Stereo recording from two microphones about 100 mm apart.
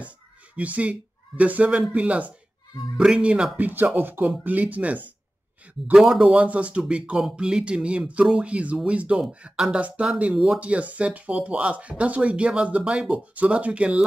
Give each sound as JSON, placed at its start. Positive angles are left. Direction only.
{"t": 0.6, "sound": "speech", "side_deg": -15}
{"t": 5.9, "sound": "speech", "side_deg": -5}
{"t": 6.2, "sound": "speech", "side_deg": -15}